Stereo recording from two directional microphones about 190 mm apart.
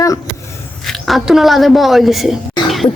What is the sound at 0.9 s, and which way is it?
A woman's voice, centre (ahead or behind).